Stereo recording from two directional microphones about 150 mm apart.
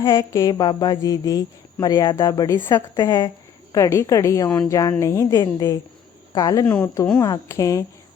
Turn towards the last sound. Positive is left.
turn(degrees=20)  # may be behind; listen again after turning